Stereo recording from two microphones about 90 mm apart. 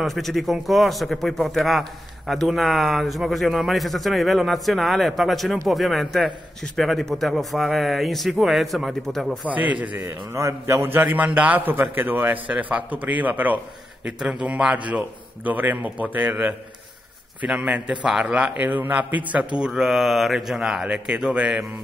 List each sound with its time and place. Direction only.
0.0 s speech: centre (ahead or behind)
9.5 s a man's voice: 15° right (ahead or behind)
10.0 s a man's voice: 30° right (ahead or behind); by 21.6 s 15° right (ahead or behind)